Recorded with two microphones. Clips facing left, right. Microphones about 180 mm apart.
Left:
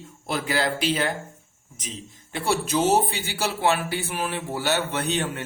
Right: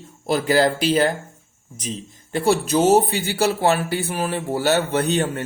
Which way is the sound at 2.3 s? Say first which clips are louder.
Right 6 dB; 40° right (ahead or behind).